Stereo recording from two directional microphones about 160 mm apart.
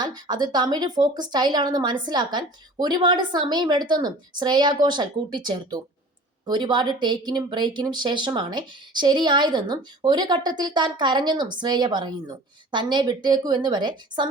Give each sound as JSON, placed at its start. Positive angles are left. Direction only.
{"t": 0.0, "sound": "speech", "side_deg": -25}